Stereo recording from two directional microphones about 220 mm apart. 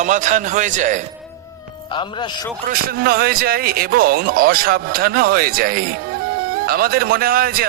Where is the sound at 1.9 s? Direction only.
20° left (ahead or behind).